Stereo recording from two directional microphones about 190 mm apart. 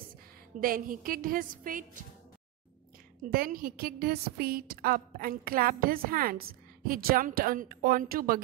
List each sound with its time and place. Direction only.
0.6 s a woman's voice: 50° right (ahead or behind)
3.3 s a woman's voice: 50° right (ahead or behind)